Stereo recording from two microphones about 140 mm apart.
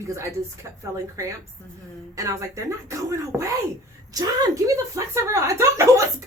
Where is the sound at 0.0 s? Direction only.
20° right (ahead or behind).